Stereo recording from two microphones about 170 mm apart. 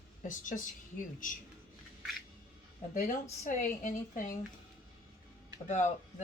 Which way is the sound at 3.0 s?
50° left (ahead or behind).